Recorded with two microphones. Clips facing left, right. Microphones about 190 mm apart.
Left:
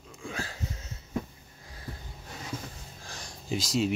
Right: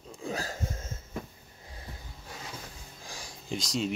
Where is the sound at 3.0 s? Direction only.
10° right (ahead or behind).